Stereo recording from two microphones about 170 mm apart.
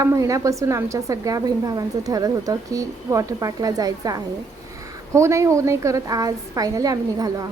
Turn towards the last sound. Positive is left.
turn(degrees=-20)  # may be behind; listen again after turning